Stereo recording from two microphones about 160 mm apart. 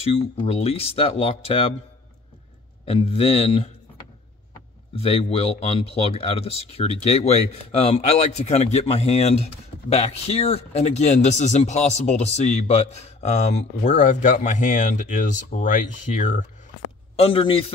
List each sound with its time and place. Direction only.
0.0 s speech: 40° left (ahead or behind)
2.8 s speech: 40° left (ahead or behind)
4.9 s speech: 35° left (ahead or behind)
17.2 s speech: 35° left (ahead or behind)